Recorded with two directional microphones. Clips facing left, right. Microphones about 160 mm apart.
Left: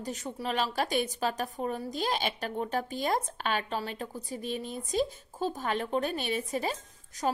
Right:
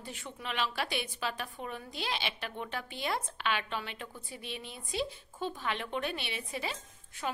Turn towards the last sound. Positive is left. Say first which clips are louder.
# left 6 dB
turn(degrees=45)  # may be behind; listen again after turning